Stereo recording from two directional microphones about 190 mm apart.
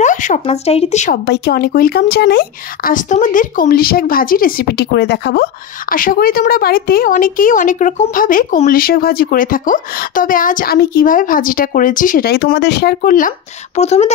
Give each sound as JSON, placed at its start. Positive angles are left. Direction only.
{"t": 0.0, "sound": "speech", "side_deg": 40}
{"t": 1.1, "sound": "speech", "side_deg": 60}
{"t": 13.7, "sound": "speech", "side_deg": 35}